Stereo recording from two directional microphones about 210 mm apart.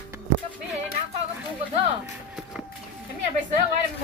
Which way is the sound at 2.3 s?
5° right (ahead or behind).